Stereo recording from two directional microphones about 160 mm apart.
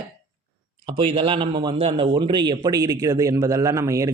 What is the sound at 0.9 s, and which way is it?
Speech, 35° right (ahead or behind).